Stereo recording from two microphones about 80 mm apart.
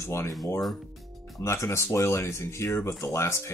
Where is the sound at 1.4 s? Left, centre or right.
Left.